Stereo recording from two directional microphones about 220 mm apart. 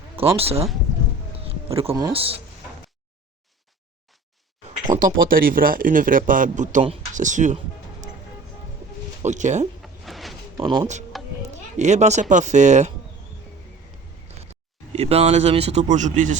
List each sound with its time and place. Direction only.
0.3 s speech: 25° right (ahead or behind)
1.4 s a sound: 25° right (ahead or behind)
1.9 s speech: 15° right (ahead or behind)
2.1 s speech: 25° right (ahead or behind)
4.9 s speech: 40° right (ahead or behind)
9.2 s speech: 35° right (ahead or behind)
9.8 s a sound: centre (ahead or behind)
10.6 s speech: 25° right (ahead or behind)
14.9 s speech: 30° right (ahead or behind)